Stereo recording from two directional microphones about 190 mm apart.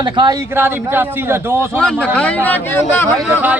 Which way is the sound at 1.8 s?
5° left (ahead or behind).